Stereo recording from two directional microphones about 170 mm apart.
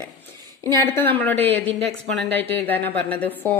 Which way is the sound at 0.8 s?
10° left (ahead or behind).